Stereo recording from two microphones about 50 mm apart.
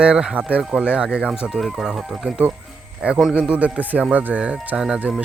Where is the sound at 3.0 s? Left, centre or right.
Right.